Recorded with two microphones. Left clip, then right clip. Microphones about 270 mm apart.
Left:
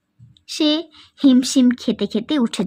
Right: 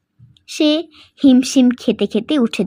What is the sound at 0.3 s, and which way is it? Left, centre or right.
A woman's voice, centre.